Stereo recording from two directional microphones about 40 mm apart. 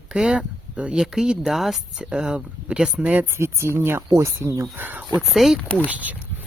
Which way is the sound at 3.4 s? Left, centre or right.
Right.